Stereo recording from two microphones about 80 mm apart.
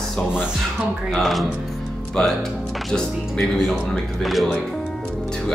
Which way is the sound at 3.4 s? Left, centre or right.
Centre.